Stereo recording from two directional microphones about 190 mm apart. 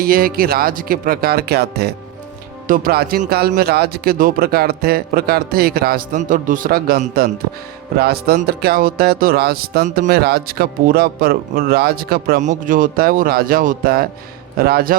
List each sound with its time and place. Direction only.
0.0 s speech: 50° right (ahead or behind)